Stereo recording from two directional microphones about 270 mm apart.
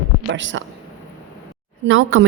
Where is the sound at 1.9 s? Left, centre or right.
Right.